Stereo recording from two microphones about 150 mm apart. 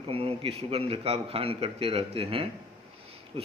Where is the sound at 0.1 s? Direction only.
40° right (ahead or behind).